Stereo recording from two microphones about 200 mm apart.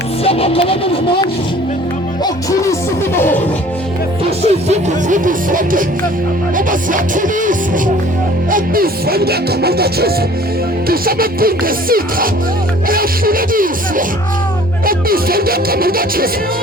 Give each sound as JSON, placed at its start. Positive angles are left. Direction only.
{"t": 0.3, "sound": "a sound", "side_deg": 30}
{"t": 2.2, "sound": "music", "side_deg": 15}
{"t": 4.2, "sound": "music", "side_deg": -35}